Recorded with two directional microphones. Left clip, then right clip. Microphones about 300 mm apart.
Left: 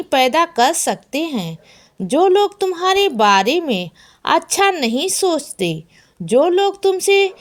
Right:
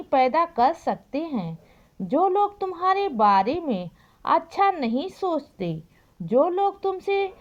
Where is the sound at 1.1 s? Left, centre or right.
Right.